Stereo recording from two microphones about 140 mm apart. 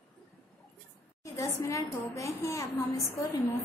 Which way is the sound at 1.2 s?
20° left (ahead or behind).